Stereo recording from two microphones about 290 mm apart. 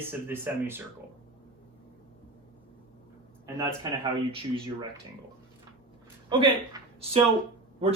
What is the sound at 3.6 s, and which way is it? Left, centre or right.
Speech, centre.